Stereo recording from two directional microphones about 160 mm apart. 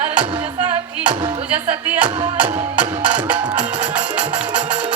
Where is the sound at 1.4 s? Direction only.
10° right (ahead or behind).